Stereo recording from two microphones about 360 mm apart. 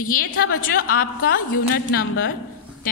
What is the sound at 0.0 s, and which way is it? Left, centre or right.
A woman's voice, left.